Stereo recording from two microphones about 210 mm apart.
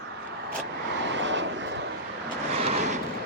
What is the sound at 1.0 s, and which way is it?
Vehicle, 60° right (ahead or behind).